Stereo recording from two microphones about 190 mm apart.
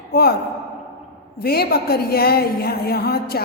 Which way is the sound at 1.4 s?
55° left (ahead or behind).